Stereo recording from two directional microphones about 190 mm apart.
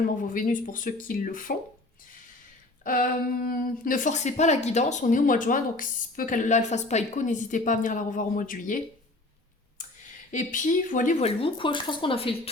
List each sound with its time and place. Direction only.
0.0 s a woman's voice: 45° left (ahead or behind)
2.8 s a woman's voice: 45° left (ahead or behind)
10.3 s speech: 40° left (ahead or behind)